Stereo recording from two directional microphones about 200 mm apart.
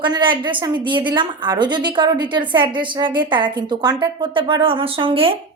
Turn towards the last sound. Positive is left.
turn(degrees=-25)  # may be behind; listen again after turning